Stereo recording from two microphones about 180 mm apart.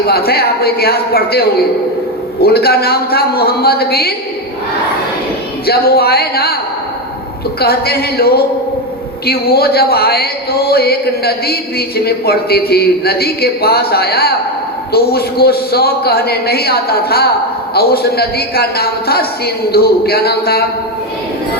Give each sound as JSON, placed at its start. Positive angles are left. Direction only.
{"t": 0.1, "sound": "a man's voice", "side_deg": 60}
{"t": 5.6, "sound": "a man's voice", "side_deg": 60}
{"t": 7.6, "sound": "a man's voice", "side_deg": 60}